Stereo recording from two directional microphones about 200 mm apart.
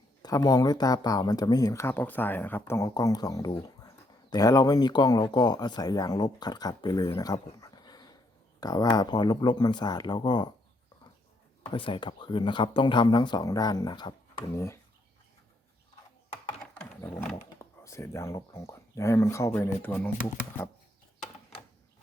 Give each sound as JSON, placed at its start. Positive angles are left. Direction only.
{"t": 0.2, "sound": "speech", "side_deg": 20}
{"t": 11.7, "sound": "speech", "side_deg": 25}
{"t": 16.6, "sound": "a sound", "side_deg": 5}
{"t": 18.5, "sound": "speech", "side_deg": 15}